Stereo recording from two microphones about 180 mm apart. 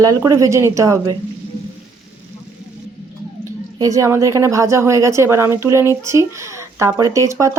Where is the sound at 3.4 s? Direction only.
20° right (ahead or behind).